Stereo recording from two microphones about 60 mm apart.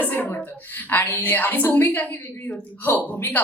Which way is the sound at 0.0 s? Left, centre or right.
Left.